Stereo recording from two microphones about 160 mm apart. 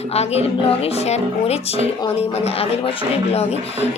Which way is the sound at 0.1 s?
40° left (ahead or behind).